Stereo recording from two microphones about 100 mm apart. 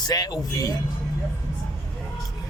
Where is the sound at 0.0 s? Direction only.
40° left (ahead or behind).